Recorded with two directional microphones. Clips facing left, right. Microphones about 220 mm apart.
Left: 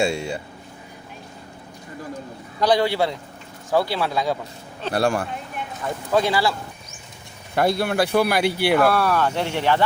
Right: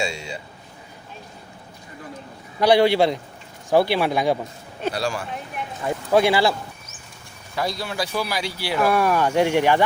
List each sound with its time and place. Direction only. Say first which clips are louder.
0.0 s speech: left 6 dB; 55° left (ahead or behind)
2.6 s speech: right 3 dB; 10° right (ahead or behind)
4.9 s speech: left 4 dB; 55° left (ahead or behind)
5.8 s speech: right 3 dB; 10° right (ahead or behind)
7.5 s speech: left 6 dB; 60° left (ahead or behind)
8.9 s speech: right 1 dB; 15° right (ahead or behind)